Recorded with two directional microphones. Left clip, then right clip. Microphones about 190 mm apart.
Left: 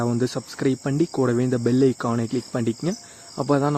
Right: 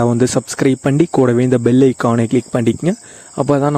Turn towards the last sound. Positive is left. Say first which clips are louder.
# right 7 dB
turn(degrees=-40)  # may be behind; listen again after turning